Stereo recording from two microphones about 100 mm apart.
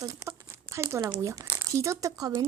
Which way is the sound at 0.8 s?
30° right (ahead or behind).